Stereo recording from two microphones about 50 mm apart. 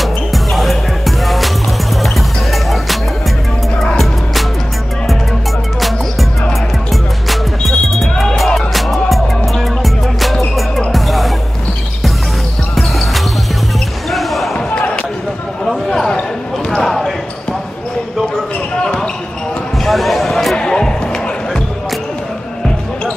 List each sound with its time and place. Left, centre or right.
0.0 s music: centre
2.5 s music: centre
5.8 s music: centre
12.7 s basketball bounce: centre
15.9 s basketball bounce: centre
18.8 s basketball bounce: centre
19.8 s basketball bounce: centre
20.5 s music: centre